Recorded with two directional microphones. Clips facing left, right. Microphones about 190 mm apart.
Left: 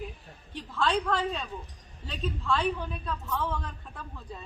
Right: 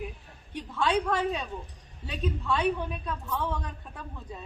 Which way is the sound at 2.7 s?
15° right (ahead or behind).